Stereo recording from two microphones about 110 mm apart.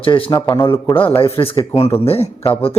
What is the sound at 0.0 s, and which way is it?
Speech, 55° left (ahead or behind).